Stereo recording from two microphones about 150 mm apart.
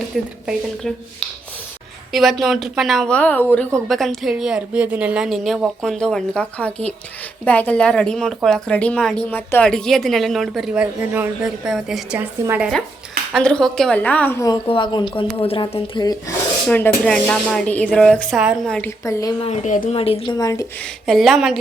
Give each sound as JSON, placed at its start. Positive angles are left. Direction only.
{"t": 0.4, "sound": "speech", "side_deg": 5}
{"t": 3.8, "sound": "speech", "side_deg": 0}
{"t": 13.3, "sound": "speech", "side_deg": 5}
{"t": 14.4, "sound": "speech", "side_deg": 30}
{"t": 16.6, "sound": "speech", "side_deg": 10}
{"t": 18.9, "sound": "speech", "side_deg": 20}
{"t": 19.6, "sound": "speech", "side_deg": 60}
{"t": 19.9, "sound": "speech", "side_deg": 40}
{"t": 20.4, "sound": "speech", "side_deg": 20}
{"t": 20.8, "sound": "speech", "side_deg": 0}